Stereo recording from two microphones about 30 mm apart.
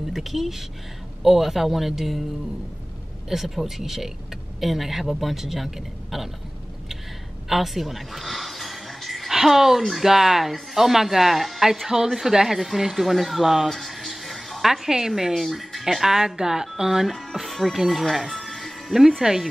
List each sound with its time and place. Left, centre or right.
0.1 s a man's voice: centre
3.3 s a man's voice: centre
7.4 s a sound: centre
9.3 s a man's voice: centre
13.7 s music: centre
14.6 s a man's voice: centre
15.5 s a man's voice: centre
17.1 s speech: centre
18.1 s music: centre
19.2 s a man's voice: centre